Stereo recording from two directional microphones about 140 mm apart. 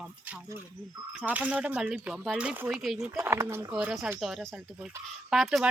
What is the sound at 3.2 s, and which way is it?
Speech, 15° right (ahead or behind).